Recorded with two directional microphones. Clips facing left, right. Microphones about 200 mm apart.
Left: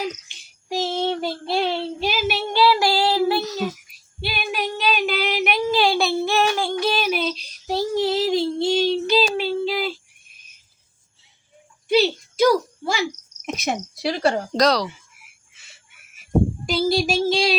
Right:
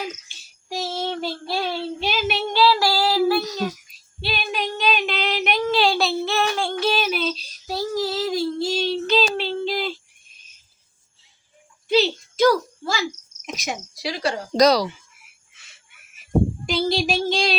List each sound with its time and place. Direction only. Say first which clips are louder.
0.3 s child singing: left 4 dB; 20° left (ahead or behind)
2.0 s child singing: left 1 dB; 5° left (ahead or behind)
2.6 s child singing: left 1 dB; 15° left (ahead or behind)
3.4 s a sound: left 1 dB; 5° left (ahead or behind)
4.2 s female singing: even; 10° left (ahead or behind)
7.7 s child singing: left 4 dB; 25° left (ahead or behind)
8.8 s child singing: even; 10° left (ahead or behind)
11.9 s child singing: left 1 dB; 10° left (ahead or behind)
12.8 s cricket: left 2 dB; 20° left (ahead or behind)
13.4 s cricket: left 5 dB; 55° left (ahead or behind)
14.5 s speech: right 2 dB; centre (ahead or behind)
16.6 s child singing: left 2 dB; 5° left (ahead or behind)